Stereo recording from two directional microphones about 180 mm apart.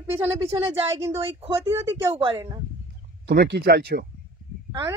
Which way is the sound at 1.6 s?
15° right (ahead or behind).